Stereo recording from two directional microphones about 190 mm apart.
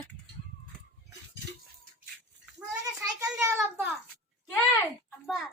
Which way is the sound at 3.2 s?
15° right (ahead or behind).